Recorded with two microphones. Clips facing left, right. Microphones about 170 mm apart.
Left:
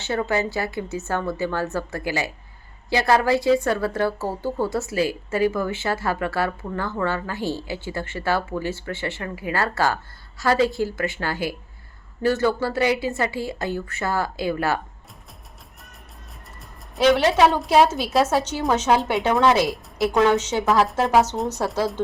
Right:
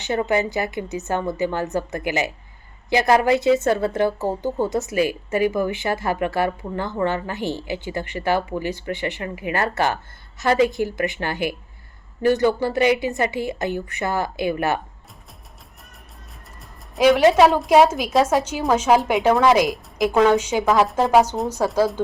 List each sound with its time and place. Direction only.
0.0 s a woman's voice: 15° right (ahead or behind)
17.0 s a woman's voice: 5° right (ahead or behind)
20.1 s a woman's voice: 5° right (ahead or behind)